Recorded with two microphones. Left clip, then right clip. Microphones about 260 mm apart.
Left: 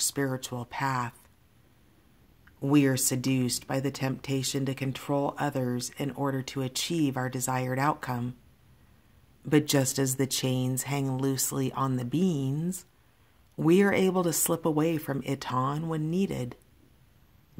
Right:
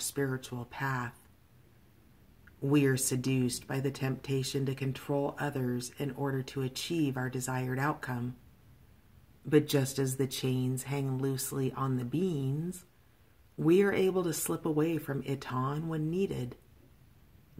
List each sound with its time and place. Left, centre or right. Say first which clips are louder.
0.1 s speech: left 3 dB; left
2.6 s speech: left 4 dB; left
9.5 s speech: left 2 dB; left